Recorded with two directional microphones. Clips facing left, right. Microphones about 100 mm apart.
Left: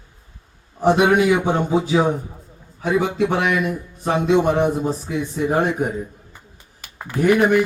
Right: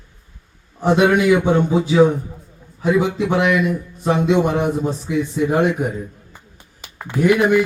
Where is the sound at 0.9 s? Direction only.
25° left (ahead or behind).